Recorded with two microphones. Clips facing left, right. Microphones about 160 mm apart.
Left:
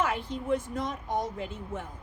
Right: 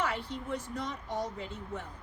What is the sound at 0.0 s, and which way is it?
Speech, 50° left (ahead or behind).